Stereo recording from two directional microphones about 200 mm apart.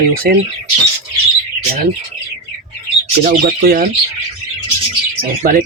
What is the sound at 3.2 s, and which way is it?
Speech, 45° right (ahead or behind).